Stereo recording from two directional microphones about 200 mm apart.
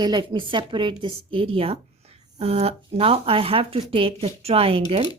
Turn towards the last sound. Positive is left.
turn(degrees=-30)  # may be behind; listen again after turning